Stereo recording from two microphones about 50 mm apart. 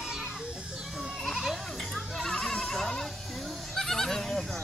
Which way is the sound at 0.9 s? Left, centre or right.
Centre.